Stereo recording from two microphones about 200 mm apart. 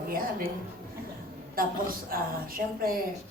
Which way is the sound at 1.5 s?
45° right (ahead or behind).